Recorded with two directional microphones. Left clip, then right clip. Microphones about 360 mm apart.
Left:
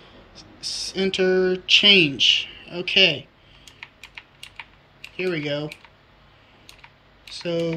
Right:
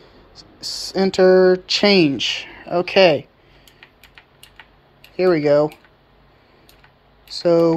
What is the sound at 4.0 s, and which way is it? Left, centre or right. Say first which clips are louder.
Typing: left 4 dB; centre.